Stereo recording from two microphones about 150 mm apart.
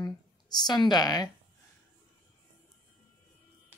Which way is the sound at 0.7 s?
30° left (ahead or behind).